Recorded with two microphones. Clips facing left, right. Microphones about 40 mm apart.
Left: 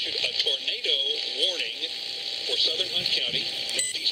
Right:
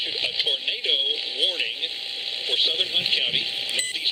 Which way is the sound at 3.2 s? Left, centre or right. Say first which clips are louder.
Right 4 dB; right.